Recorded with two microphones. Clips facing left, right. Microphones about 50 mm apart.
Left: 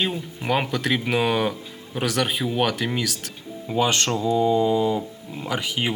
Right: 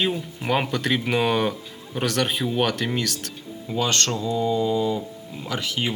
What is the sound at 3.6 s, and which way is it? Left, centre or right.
Speech, centre.